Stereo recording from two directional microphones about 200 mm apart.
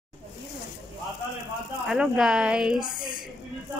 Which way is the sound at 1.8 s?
5° right (ahead or behind).